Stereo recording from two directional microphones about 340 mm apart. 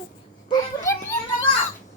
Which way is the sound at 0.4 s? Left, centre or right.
Centre.